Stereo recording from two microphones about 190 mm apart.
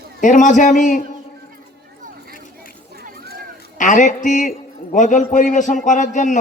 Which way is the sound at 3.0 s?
50° right (ahead or behind).